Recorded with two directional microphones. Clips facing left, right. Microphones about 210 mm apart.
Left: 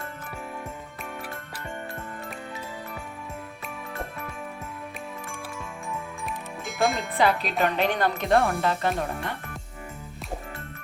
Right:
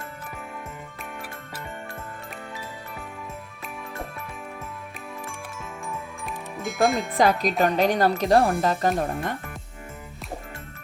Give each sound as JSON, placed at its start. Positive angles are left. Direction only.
{"t": 6.2, "sound": "music", "side_deg": 0}
{"t": 7.2, "sound": "speech", "side_deg": -40}